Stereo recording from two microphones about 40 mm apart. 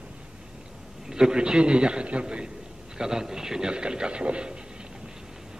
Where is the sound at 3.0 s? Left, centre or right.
Centre.